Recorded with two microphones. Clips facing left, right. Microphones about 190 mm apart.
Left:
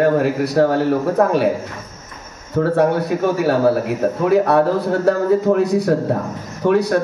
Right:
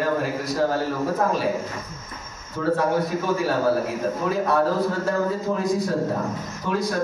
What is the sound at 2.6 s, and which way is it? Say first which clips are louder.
A man's voice: left 6 dB; 60° left (ahead or behind).